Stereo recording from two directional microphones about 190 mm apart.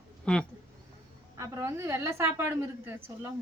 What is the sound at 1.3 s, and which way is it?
A woman's voice, 15° right (ahead or behind).